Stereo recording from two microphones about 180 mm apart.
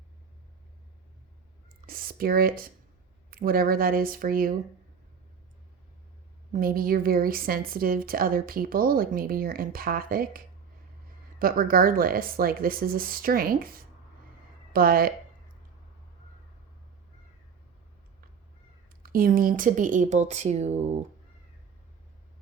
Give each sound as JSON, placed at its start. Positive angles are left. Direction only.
{"t": 1.9, "sound": "a woman's voice", "side_deg": -55}
{"t": 6.5, "sound": "a woman's voice", "side_deg": -55}
{"t": 19.0, "sound": "a woman's voice", "side_deg": -55}